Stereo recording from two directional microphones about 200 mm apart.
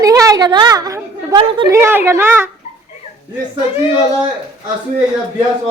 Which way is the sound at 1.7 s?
10° right (ahead or behind).